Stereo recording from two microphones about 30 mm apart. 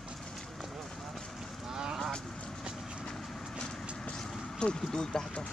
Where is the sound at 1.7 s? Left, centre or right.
Right.